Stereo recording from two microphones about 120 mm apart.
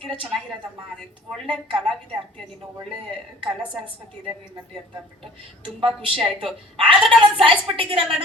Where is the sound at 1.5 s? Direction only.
45° right (ahead or behind).